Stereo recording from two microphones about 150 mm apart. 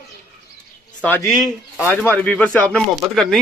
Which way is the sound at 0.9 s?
15° left (ahead or behind).